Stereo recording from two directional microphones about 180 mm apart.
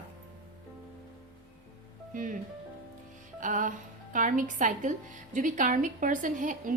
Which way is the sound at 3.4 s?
45° right (ahead or behind).